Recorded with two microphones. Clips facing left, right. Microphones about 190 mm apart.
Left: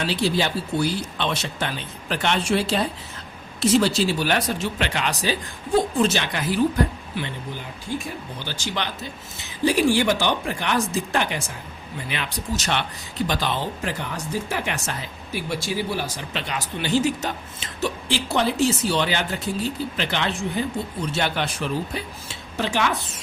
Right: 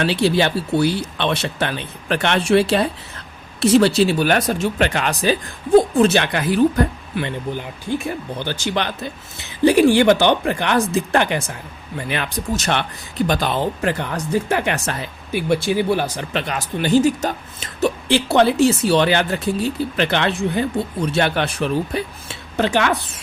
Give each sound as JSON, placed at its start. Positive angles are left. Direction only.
{"t": 0.0, "sound": "speech", "side_deg": -65}
{"t": 18.1, "sound": "speech", "side_deg": -65}